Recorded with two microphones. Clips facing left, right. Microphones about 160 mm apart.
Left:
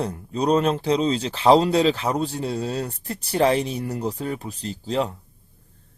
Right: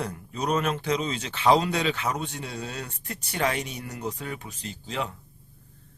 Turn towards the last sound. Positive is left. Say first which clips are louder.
# left 8 dB
turn(degrees=35)  # may be behind; listen again after turning